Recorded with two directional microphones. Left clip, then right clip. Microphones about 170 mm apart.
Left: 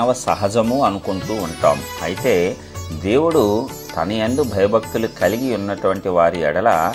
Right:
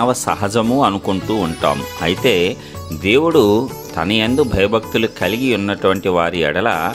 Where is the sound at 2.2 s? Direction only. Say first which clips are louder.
Right 1 dB; 90° right.